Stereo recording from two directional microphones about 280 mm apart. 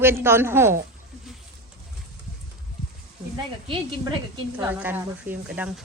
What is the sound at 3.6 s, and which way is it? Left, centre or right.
Speech, centre.